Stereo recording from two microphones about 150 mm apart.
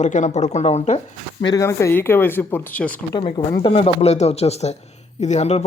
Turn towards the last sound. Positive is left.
turn(degrees=45)  # may be behind; listen again after turning